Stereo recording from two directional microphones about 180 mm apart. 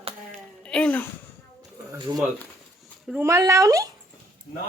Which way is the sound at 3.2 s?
15° right (ahead or behind).